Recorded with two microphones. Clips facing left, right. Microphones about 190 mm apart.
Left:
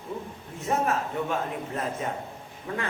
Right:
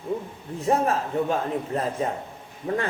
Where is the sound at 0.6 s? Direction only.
35° right (ahead or behind).